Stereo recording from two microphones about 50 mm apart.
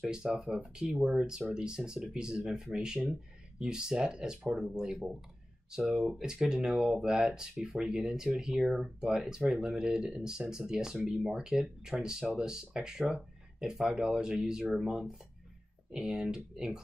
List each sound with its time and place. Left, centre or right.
0.0 s speech: centre
13.1 s a sound: centre
13.8 s speech: centre